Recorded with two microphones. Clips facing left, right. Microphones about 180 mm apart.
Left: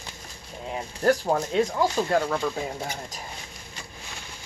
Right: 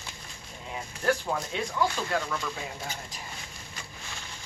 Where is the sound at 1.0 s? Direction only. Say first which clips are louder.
Left 6 dB; 40° left (ahead or behind).